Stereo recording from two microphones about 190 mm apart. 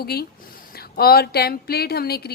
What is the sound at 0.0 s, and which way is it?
A woman's voice, 55° left (ahead or behind).